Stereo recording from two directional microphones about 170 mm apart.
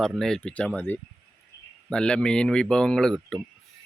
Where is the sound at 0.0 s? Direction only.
Centre (ahead or behind).